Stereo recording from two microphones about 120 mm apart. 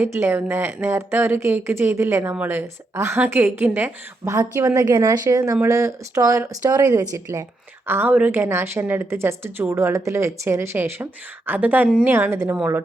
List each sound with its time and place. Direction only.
0.0 s a woman's voice: 20° right (ahead or behind)
4.4 s a woman's voice: 25° right (ahead or behind)
7.9 s a woman's voice: 15° right (ahead or behind)